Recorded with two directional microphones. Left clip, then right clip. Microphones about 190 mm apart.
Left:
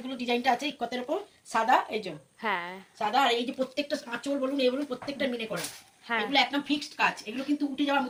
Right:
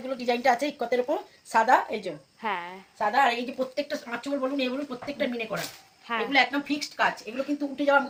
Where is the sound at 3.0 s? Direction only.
45° right (ahead or behind).